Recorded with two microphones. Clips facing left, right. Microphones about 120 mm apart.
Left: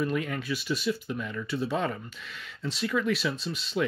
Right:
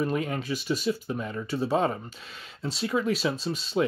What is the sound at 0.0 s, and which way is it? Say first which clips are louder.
Speech: right 2 dB; 35° right (ahead or behind).